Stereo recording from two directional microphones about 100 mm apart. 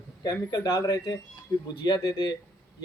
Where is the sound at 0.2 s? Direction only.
40° left (ahead or behind).